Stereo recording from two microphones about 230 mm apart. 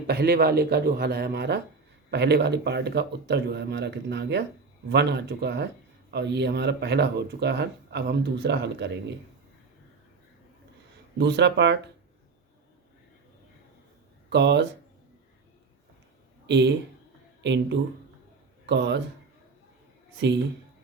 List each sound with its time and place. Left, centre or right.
0.1 s speech: right
11.2 s speech: right
14.3 s speech: right
16.5 s a man's voice: right
20.1 s speech: right